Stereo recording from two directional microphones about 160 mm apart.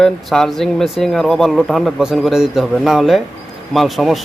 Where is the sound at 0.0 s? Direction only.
Centre (ahead or behind).